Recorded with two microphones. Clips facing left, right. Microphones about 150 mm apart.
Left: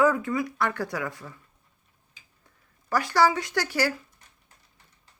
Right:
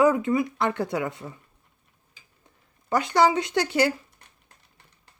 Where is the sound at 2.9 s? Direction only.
20° right (ahead or behind).